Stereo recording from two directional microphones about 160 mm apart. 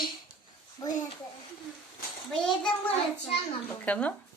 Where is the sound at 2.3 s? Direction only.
5° left (ahead or behind).